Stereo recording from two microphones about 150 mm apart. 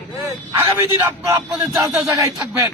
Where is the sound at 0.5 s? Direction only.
20° right (ahead or behind).